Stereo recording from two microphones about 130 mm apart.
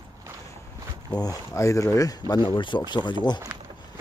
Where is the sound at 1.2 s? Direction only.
25° left (ahead or behind).